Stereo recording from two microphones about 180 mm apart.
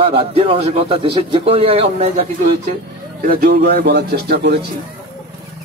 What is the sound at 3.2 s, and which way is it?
Speech, 55° right (ahead or behind).